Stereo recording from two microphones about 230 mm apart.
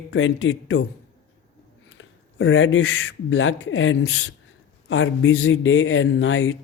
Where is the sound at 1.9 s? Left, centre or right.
Left.